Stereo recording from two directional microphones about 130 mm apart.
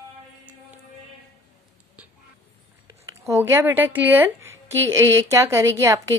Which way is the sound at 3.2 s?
20° right (ahead or behind).